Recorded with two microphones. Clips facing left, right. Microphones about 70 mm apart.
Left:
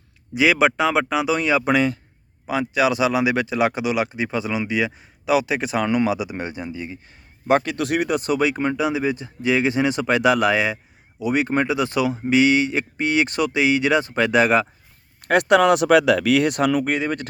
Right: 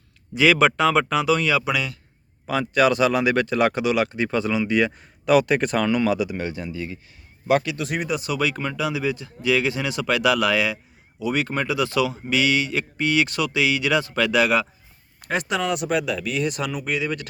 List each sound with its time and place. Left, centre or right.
0.3 s speech: centre
1.6 s a man's voice: left
2.5 s speech: centre
5.8 s speech: left
7.4 s a man's voice: left
7.8 s speech: left
8.3 s speech: left
15.3 s speech: left